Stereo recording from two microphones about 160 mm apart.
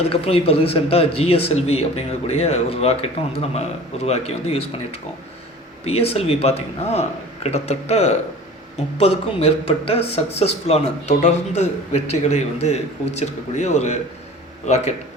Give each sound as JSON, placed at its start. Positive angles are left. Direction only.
{"t": 0.0, "sound": "a man's voice", "side_deg": 40}